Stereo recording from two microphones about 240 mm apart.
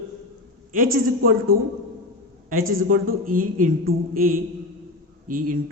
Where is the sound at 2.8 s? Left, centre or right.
Right.